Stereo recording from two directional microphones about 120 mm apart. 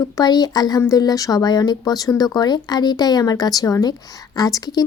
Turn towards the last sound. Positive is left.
turn(degrees=30)  # may be behind; listen again after turning